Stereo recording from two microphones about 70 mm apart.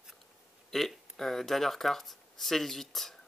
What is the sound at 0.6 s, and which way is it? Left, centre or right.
Speech, centre.